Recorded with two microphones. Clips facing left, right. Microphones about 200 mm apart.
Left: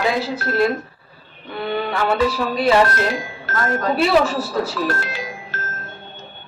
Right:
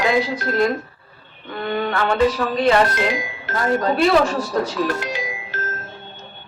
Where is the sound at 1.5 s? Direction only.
5° left (ahead or behind).